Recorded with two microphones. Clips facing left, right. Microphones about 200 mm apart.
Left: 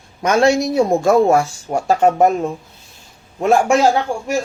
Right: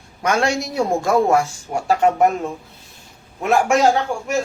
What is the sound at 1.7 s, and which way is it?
Speech, 40° left (ahead or behind).